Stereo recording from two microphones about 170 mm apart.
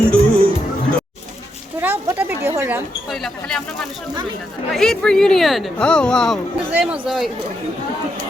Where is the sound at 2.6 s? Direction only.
15° right (ahead or behind).